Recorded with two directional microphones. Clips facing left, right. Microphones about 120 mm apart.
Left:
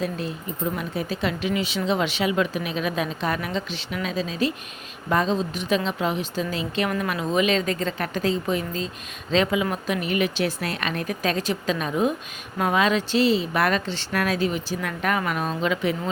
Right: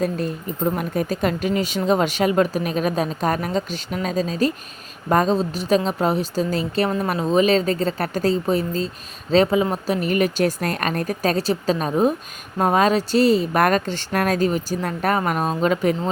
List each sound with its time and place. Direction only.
0.0 s a woman's voice: 45° right (ahead or behind)